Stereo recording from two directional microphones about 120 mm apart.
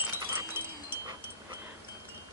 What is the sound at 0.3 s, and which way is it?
Chime, 20° right (ahead or behind).